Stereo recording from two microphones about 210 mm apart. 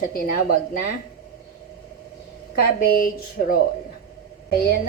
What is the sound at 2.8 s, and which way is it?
Speech, 45° left (ahead or behind).